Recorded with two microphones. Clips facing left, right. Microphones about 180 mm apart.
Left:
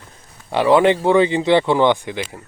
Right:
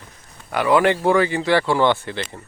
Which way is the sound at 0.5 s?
25° left (ahead or behind).